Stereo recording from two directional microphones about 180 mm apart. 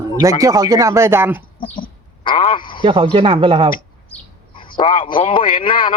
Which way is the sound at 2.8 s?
30° right (ahead or behind).